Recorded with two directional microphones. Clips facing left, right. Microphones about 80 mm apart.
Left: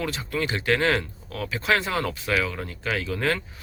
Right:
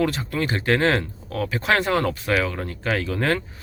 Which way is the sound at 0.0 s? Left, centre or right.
Right.